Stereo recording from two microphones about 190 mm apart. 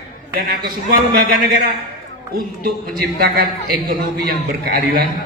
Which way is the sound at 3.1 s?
50° right (ahead or behind).